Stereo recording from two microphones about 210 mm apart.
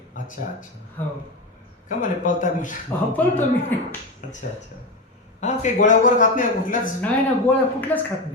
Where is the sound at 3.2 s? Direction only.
10° left (ahead or behind).